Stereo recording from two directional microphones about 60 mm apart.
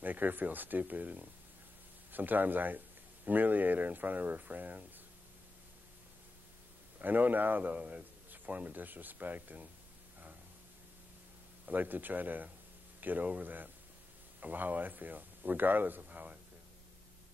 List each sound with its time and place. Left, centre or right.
0.0 s speech: right
7.0 s speech: right
11.7 s speech: right